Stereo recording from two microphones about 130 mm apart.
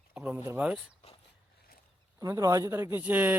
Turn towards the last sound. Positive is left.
turn(degrees=-15)  # may be behind; listen again after turning